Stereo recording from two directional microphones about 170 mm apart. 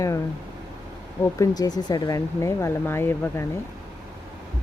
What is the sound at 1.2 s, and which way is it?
Speech, 20° left (ahead or behind).